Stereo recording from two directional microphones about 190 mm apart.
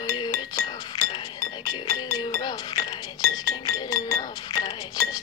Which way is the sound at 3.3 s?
20° left (ahead or behind).